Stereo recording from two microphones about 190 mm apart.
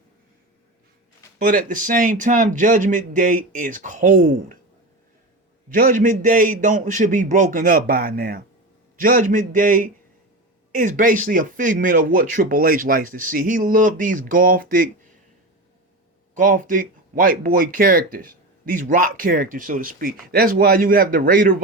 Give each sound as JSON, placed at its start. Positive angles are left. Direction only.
{"t": 1.4, "sound": "speech", "side_deg": -45}
{"t": 5.6, "sound": "speech", "side_deg": -45}
{"t": 16.3, "sound": "speech", "side_deg": -45}